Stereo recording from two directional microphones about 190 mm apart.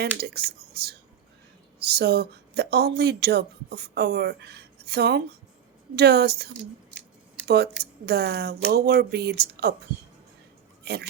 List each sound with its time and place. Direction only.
0.0 s speech: 60° right (ahead or behind)
10.8 s speech: 60° right (ahead or behind)